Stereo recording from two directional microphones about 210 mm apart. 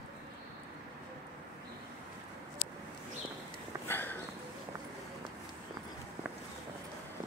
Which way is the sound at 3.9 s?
10° left (ahead or behind).